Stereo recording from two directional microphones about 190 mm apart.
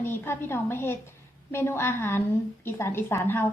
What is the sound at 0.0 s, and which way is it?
A woman's voice, 10° left (ahead or behind).